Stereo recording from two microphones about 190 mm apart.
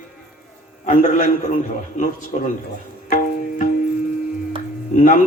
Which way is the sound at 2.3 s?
50° left (ahead or behind).